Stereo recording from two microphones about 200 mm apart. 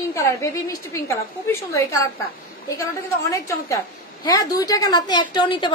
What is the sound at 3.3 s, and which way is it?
A woman's voice, 15° left (ahead or behind).